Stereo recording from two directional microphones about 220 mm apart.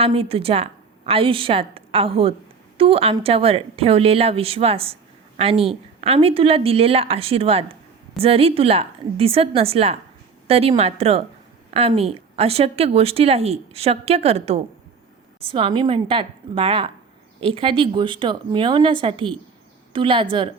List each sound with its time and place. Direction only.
0.0 s a woman's voice: 25° right (ahead or behind)